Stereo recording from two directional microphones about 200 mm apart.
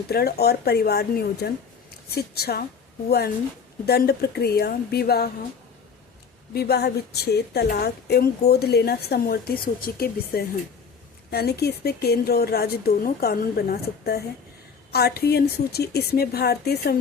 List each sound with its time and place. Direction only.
0.1 s a woman's voice: 50° left (ahead or behind)
6.5 s a woman's voice: 55° left (ahead or behind)